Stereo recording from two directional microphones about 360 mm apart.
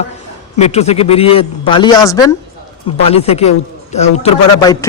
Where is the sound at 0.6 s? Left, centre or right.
Centre.